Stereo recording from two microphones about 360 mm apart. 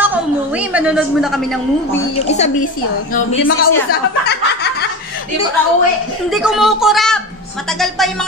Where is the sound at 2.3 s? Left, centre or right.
Centre.